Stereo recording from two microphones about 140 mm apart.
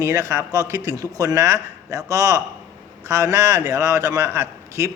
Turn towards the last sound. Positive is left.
turn(degrees=-20)  # may be behind; listen again after turning